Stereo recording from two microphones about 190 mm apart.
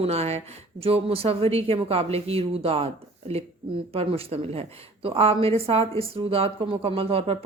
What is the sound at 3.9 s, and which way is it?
Speech, 30° right (ahead or behind).